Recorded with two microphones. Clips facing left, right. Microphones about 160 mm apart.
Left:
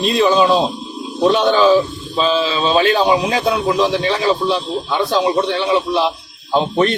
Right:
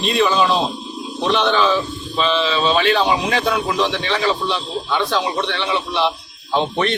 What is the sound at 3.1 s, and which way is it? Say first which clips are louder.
Speech: left 3 dB; 25° left (ahead or behind).